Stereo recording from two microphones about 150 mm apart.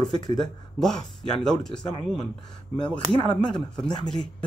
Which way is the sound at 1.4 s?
5° left (ahead or behind).